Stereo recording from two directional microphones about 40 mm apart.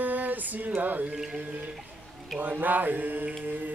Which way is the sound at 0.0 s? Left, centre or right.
Right.